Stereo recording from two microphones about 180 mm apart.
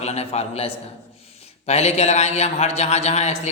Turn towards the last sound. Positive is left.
turn(degrees=35)  # may be behind; listen again after turning